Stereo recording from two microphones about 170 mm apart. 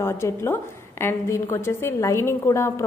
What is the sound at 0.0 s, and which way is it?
A woman's voice, 15° left (ahead or behind).